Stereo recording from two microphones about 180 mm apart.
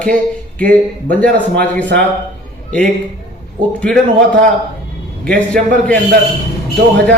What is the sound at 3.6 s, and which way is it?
Speech, 25° right (ahead or behind).